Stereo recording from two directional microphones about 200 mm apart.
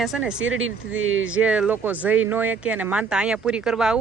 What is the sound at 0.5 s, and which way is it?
Speech, 75° right (ahead or behind).